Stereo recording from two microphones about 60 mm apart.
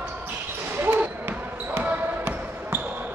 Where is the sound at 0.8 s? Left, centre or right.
Right.